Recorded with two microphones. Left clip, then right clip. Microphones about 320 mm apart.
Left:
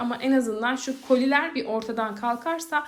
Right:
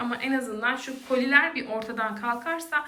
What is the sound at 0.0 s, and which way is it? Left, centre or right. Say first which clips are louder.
A woman's voice: left 4 dB; centre.